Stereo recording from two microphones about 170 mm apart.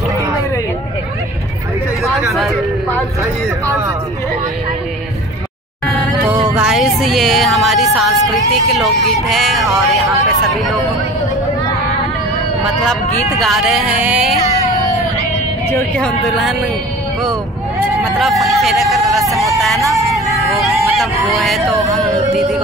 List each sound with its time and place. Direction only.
6.5 s speech: 5° right (ahead or behind)
12.6 s speech: centre (ahead or behind)
15.7 s speech: 5° left (ahead or behind)
17.9 s speech: centre (ahead or behind)
19.8 s speech: 20° right (ahead or behind)
20.5 s speech: centre (ahead or behind)